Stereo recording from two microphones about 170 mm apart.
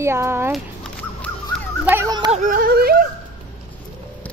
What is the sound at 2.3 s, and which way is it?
Yodeling, 50° right (ahead or behind).